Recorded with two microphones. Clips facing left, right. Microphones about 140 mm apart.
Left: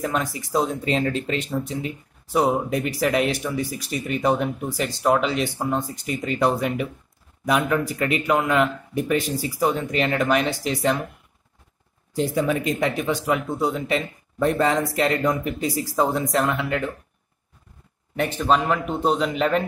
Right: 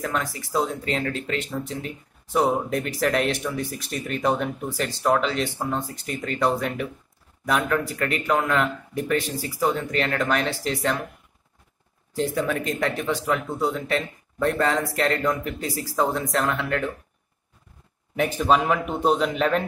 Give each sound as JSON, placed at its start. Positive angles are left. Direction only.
{"t": 0.0, "sound": "speech", "side_deg": 15}
{"t": 2.3, "sound": "speech", "side_deg": 5}
{"t": 12.1, "sound": "speech", "side_deg": 15}
{"t": 18.1, "sound": "speech", "side_deg": -5}